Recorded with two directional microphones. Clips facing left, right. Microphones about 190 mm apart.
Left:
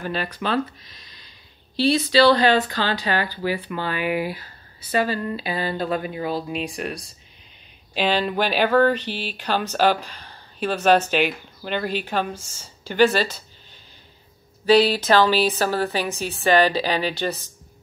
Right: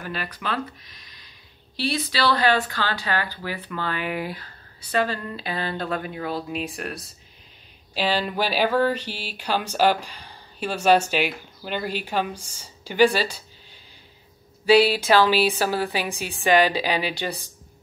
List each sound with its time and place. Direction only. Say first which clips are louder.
0.0 s speech: left 5 dB; 30° left (ahead or behind); by 13.4 s 10° right (ahead or behind)
14.7 s speech: left 1 dB; 10° right (ahead or behind)